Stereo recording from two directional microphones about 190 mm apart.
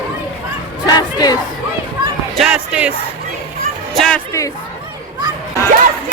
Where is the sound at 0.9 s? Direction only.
20° left (ahead or behind).